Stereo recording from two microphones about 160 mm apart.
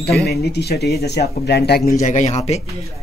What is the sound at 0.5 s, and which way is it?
Speech, 90° left.